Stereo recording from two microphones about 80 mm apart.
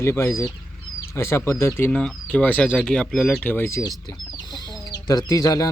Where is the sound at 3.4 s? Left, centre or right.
Left.